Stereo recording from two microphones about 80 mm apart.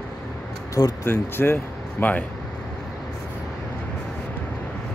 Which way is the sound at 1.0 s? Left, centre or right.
Left.